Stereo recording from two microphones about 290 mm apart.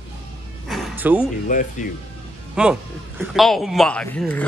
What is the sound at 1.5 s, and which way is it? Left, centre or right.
Speech, left.